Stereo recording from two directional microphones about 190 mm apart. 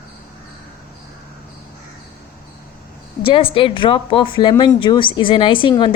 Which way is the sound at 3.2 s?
30° left (ahead or behind).